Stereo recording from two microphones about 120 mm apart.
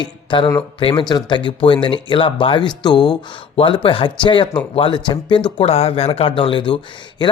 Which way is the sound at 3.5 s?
45° left (ahead or behind).